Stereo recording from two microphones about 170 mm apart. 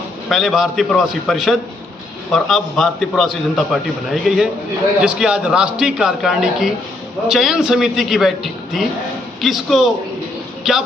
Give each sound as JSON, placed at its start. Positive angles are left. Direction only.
{"t": 0.3, "sound": "a man's voice", "side_deg": 0}